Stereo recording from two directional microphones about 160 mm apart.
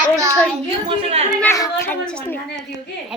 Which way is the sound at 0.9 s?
35° right (ahead or behind).